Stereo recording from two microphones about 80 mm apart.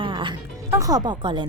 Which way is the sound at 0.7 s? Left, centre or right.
Right.